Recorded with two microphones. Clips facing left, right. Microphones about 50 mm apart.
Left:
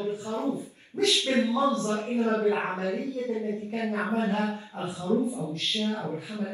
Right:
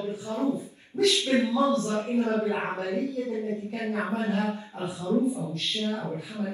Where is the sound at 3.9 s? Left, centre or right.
Left.